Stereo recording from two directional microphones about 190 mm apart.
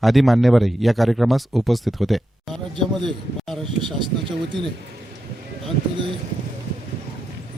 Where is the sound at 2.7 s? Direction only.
25° right (ahead or behind).